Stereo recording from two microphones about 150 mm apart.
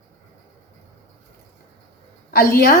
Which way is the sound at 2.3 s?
80° left.